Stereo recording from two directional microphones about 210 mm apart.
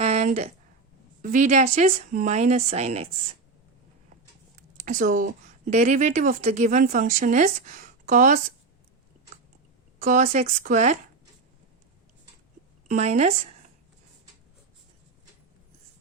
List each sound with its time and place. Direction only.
0.0 s a sound: 30° right (ahead or behind)
1.2 s a woman's voice: 35° right (ahead or behind)
4.9 s a woman's voice: 40° right (ahead or behind)
10.0 s a woman's voice: 35° right (ahead or behind)
12.9 s a woman's voice: 30° right (ahead or behind)